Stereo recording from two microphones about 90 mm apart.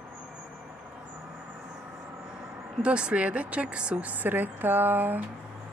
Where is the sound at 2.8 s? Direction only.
10° right (ahead or behind).